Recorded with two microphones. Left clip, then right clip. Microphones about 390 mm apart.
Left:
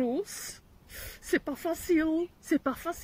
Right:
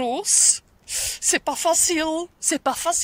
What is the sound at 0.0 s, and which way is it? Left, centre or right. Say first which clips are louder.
Speech: right 11 dB; right.